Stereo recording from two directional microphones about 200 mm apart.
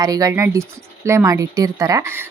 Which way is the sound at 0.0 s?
15° right (ahead or behind).